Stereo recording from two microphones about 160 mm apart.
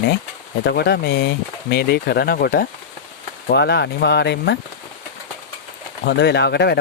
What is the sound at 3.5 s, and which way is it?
Speech, 90° left.